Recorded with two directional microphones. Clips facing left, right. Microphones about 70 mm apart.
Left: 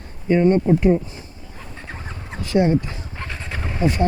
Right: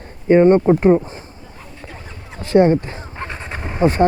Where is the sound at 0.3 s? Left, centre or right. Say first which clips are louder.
Right 5 dB; right.